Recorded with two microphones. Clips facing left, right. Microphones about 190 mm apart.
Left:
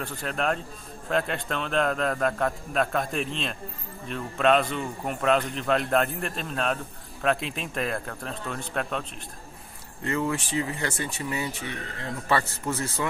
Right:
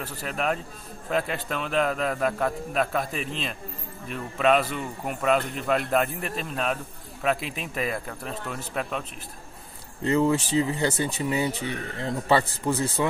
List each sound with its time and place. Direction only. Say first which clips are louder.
0.0 s a man's voice: even; 5° right (ahead or behind)
10.0 s speech: right 6 dB; 30° right (ahead or behind)